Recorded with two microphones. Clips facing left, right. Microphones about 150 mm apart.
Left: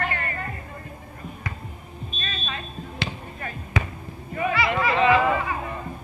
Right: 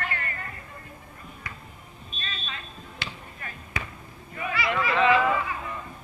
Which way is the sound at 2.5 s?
25° left (ahead or behind).